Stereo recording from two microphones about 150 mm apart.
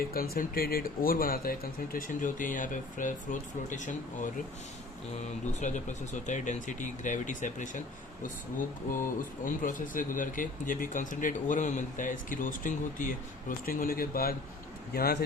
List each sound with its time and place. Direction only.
0.1 s speech: 75° left (ahead or behind); by 4.3 s 55° left (ahead or behind)
5.5 s a man's voice: 55° left (ahead or behind); by 15.2 s 90° left